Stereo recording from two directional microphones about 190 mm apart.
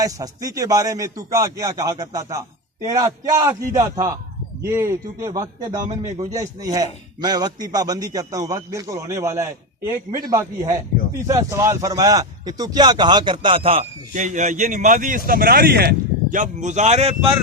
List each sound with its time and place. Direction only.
0.0 s a man's voice: 20° right (ahead or behind); by 17.3 s 35° right (ahead or behind)